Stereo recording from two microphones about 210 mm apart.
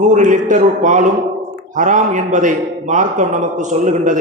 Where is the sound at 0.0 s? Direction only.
35° right (ahead or behind).